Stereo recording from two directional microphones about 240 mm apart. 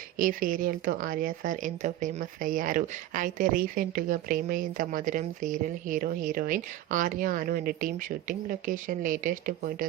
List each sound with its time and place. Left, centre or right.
0.2 s speech: right